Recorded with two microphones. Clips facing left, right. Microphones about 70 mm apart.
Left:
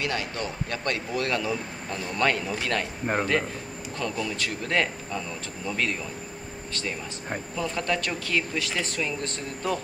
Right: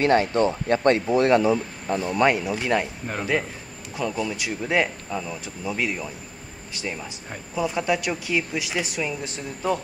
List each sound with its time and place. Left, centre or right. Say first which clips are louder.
0.0 s speech: right 11 dB; right; by 9.8 s centre